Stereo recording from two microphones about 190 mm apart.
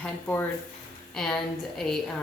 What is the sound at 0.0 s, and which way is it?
A woman's voice, 5° left (ahead or behind).